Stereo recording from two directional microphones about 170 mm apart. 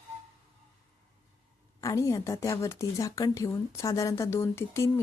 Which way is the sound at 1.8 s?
20° left (ahead or behind).